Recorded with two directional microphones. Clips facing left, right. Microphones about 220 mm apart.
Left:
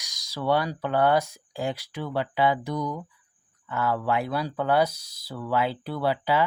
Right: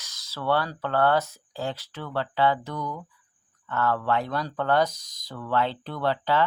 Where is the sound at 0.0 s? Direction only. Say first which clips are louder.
Left 2 dB; 15° left (ahead or behind).